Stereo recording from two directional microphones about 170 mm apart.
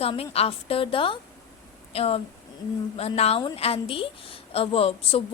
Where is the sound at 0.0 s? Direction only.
35° left (ahead or behind).